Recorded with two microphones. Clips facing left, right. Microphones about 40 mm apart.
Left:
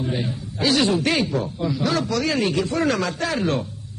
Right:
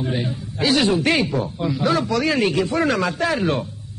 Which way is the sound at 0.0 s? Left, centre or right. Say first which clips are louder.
Right 1 dB; centre.